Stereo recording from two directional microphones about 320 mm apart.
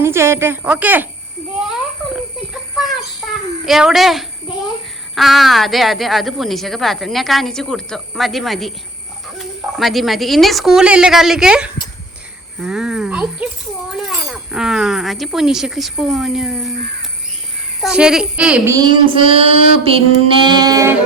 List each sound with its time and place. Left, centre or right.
0.0 s child singing: centre
2.1 s a sound: centre
3.7 s a woman's voice: centre
17.8 s child singing: centre